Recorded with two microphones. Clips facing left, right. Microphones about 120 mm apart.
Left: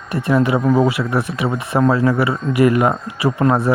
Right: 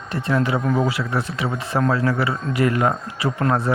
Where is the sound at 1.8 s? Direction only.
25° left (ahead or behind).